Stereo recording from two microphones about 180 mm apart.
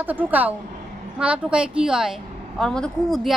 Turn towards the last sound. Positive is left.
turn(degrees=0)  # may be behind; listen again after turning